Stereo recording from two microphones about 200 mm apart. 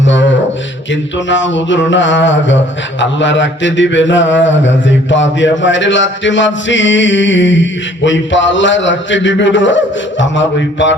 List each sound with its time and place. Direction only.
0.0 s beatboxing: 65° left (ahead or behind)
1.3 s mantra: 65° left (ahead or behind)